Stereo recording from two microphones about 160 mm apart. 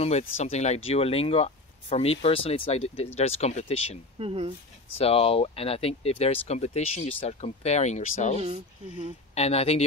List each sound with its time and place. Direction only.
0.4 s speech: 45° left (ahead or behind)
4.2 s speech: 35° right (ahead or behind)
4.9 s speech: 35° left (ahead or behind)